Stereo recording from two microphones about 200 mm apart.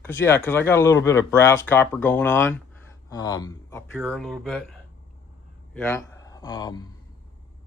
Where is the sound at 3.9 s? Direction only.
5° left (ahead or behind); by 6.8 s 20° left (ahead or behind).